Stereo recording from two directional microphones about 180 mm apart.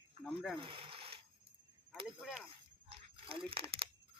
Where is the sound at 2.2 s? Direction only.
5° right (ahead or behind).